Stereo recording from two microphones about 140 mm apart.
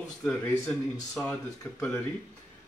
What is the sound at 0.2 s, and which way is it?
Speech, 10° left (ahead or behind).